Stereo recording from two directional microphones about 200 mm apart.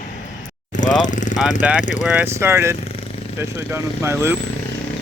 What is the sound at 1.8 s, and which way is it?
Speech, 40° left (ahead or behind).